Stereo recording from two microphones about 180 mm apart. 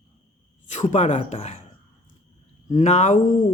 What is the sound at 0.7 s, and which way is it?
Speech, 40° left (ahead or behind).